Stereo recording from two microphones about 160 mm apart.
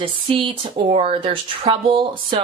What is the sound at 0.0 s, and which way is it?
Speech, 35° right (ahead or behind).